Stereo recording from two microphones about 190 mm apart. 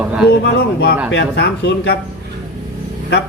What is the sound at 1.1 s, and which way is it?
Speech, 65° left (ahead or behind).